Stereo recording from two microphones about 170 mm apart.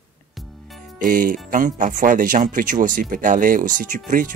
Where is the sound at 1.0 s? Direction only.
50° right (ahead or behind).